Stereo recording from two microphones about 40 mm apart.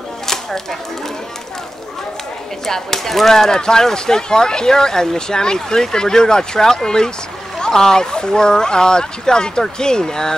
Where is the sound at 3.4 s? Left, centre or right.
Centre.